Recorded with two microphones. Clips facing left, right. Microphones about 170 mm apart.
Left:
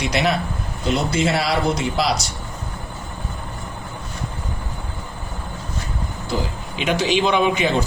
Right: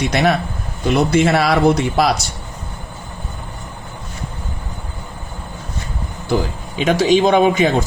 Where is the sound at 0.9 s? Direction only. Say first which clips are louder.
Right 7 dB; 60° right (ahead or behind).